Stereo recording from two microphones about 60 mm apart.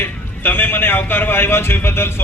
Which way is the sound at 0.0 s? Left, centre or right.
Left.